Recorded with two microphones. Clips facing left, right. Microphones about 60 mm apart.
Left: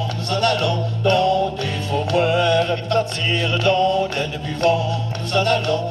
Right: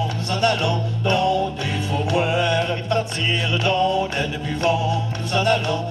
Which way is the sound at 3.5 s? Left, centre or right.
Centre.